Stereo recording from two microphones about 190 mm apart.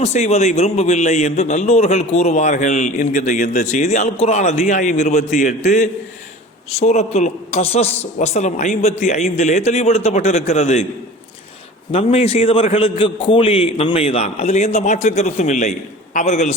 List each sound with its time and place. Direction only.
0.0 s a man's voice: 35° left (ahead or behind)
11.9 s a man's voice: 30° left (ahead or behind)